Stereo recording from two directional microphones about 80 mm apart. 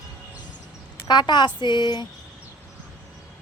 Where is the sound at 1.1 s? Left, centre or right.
Left.